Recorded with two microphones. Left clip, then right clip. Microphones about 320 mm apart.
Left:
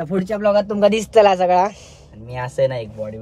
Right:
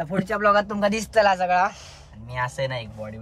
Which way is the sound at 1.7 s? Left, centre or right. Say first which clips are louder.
Left 1 dB; right.